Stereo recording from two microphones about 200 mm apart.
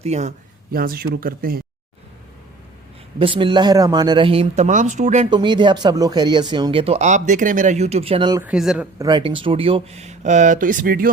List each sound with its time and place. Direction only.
0.0 s speech: 35° right (ahead or behind)
3.2 s speech: 25° right (ahead or behind)
5.3 s speech: 25° right (ahead or behind)
8.4 s speech: 5° right (ahead or behind)
9.0 s speech: 20° right (ahead or behind); by 11.1 s 45° right (ahead or behind)